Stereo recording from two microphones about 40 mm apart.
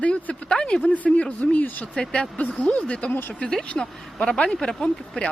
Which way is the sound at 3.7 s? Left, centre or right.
Centre.